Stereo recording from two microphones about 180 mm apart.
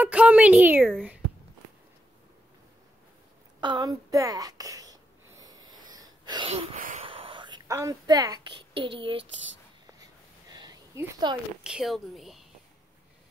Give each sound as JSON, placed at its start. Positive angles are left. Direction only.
{"t": 0.0, "sound": "a woman's voice", "side_deg": -10}
{"t": 3.6, "sound": "speech", "side_deg": -25}
{"t": 5.4, "sound": "wheeze", "side_deg": -20}
{"t": 7.0, "sound": "a sound", "side_deg": -30}
{"t": 10.5, "sound": "a sound", "side_deg": -25}
{"t": 11.0, "sound": "a woman's voice", "side_deg": -25}
{"t": 11.6, "sound": "speech", "side_deg": -5}